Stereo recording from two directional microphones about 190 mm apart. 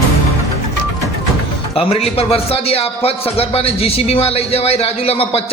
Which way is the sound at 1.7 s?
30° left (ahead or behind).